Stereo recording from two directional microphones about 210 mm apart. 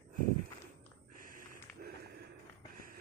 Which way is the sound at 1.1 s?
40° right (ahead or behind).